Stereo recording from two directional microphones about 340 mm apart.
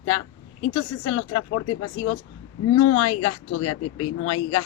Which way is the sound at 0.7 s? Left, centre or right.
Left.